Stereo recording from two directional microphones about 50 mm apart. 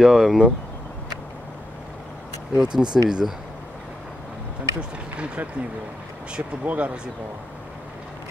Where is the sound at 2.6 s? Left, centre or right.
Centre.